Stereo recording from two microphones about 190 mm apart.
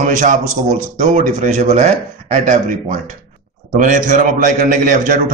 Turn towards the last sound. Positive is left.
turn(degrees=-45)  # may be behind; listen again after turning